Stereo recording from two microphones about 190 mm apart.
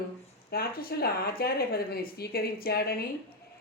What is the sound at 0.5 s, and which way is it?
Speech, 55° left (ahead or behind).